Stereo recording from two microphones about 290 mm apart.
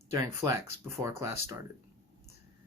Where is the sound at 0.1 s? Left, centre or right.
Centre.